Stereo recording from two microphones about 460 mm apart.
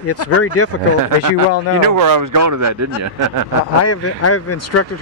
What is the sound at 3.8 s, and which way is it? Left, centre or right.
Speech, left.